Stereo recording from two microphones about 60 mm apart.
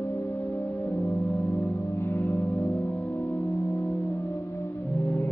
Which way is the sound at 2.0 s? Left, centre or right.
Left.